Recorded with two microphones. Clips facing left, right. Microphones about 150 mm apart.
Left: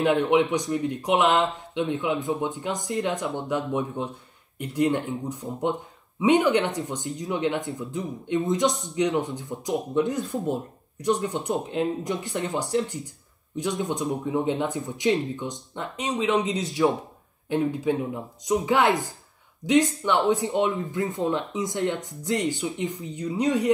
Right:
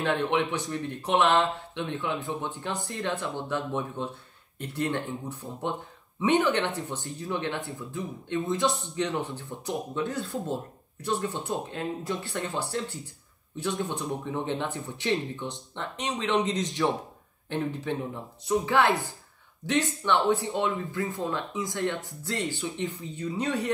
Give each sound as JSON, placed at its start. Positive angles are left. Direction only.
{"t": 0.0, "sound": "speech", "side_deg": 15}